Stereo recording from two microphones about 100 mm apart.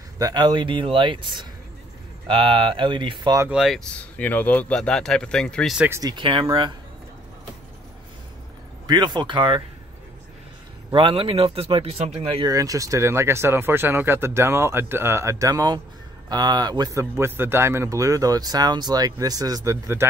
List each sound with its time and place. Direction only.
0.2 s speech: 50° right (ahead or behind)
3.4 s speech: 5° right (ahead or behind)
3.8 s speech: 15° left (ahead or behind)
6.0 s speech: 55° right (ahead or behind)
8.8 s speech: 45° right (ahead or behind)
10.9 s speech: 55° right (ahead or behind); by 12.4 s 90° right
12.4 s speech: 35° right (ahead or behind)
17.0 s speech: 25° right (ahead or behind)